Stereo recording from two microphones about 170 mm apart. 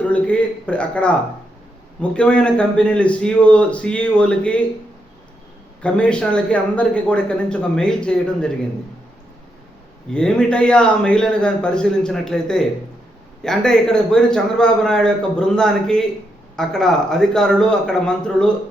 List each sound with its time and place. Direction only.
0.0 s a sound: 10° left (ahead or behind)
2.0 s a man's voice: 5° left (ahead or behind)
5.8 s a man's voice: 5° left (ahead or behind)
10.1 s a man's voice: 5° left (ahead or behind)